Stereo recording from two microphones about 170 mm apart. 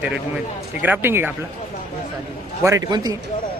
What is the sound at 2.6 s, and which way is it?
Speech, 20° right (ahead or behind).